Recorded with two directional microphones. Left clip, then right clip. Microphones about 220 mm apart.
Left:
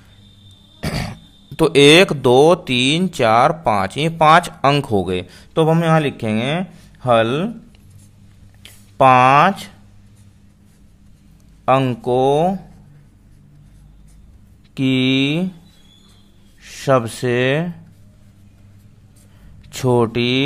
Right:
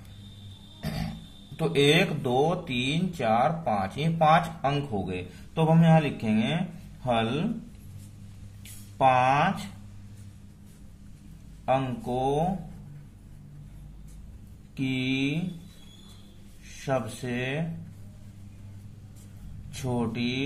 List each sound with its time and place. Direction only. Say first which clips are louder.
0.7 s a sound: left 11 dB; 45° left (ahead or behind)
1.6 s speech: left 13 dB; 45° left (ahead or behind)
8.9 s speech: left 11 dB; 50° left (ahead or behind)
11.6 s speech: left 11 dB; 55° left (ahead or behind)
14.7 s speech: left 12 dB; 55° left (ahead or behind)
16.8 s speech: left 13 dB; 55° left (ahead or behind)
19.7 s speech: left 15 dB; 55° left (ahead or behind)